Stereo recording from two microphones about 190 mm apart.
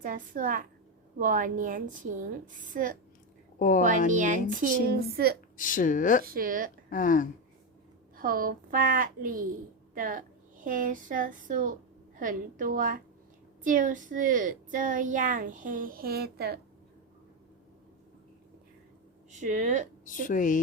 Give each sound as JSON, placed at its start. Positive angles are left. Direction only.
{"t": 0.0, "sound": "a child's voice", "side_deg": -45}
{"t": 3.6, "sound": "speech", "side_deg": 45}
{"t": 4.1, "sound": "speech", "side_deg": -40}
{"t": 5.5, "sound": "speech", "side_deg": 45}
{"t": 6.2, "sound": "a child's voice", "side_deg": -50}
{"t": 6.9, "sound": "speech", "side_deg": 45}
{"t": 8.1, "sound": "a child's voice", "side_deg": -50}
{"t": 19.3, "sound": "speech", "side_deg": -40}
{"t": 20.1, "sound": "speech", "side_deg": 45}